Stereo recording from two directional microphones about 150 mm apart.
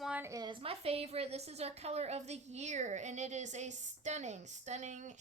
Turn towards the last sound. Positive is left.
turn(degrees=-55)  # may be behind; listen again after turning